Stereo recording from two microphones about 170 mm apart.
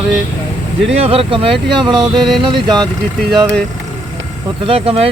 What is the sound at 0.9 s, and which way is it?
Speech, 35° right (ahead or behind).